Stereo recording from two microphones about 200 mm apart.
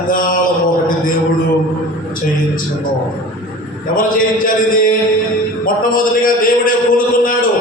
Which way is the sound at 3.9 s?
45° left (ahead or behind).